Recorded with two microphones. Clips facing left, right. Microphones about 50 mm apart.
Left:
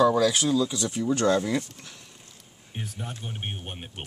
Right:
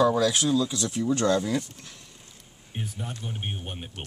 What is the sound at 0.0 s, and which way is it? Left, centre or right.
Speech, centre.